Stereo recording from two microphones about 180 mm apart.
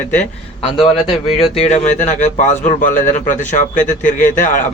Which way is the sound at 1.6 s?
40° left (ahead or behind).